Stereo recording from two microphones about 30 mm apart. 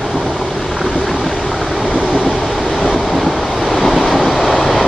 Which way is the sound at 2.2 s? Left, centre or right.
Centre.